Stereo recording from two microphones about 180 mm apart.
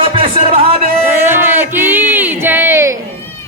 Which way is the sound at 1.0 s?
10° right (ahead or behind).